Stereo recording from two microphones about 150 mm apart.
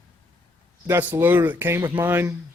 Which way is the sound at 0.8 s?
15° right (ahead or behind).